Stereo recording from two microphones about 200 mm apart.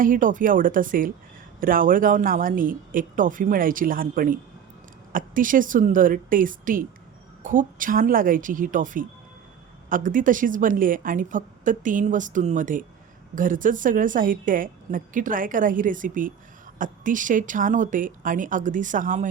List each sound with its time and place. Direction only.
0.0 s a woman's voice: 40° right (ahead or behind)